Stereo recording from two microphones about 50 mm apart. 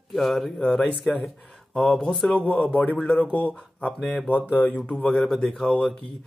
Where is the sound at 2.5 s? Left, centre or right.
Left.